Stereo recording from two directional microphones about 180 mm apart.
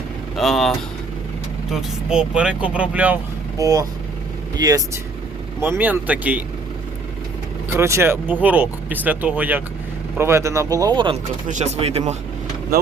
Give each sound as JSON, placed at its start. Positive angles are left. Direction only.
{"t": 0.3, "sound": "speech", "side_deg": 0}
{"t": 3.6, "sound": "speech", "side_deg": -20}
{"t": 7.8, "sound": "speech", "side_deg": -15}
{"t": 11.5, "sound": "speech", "side_deg": -35}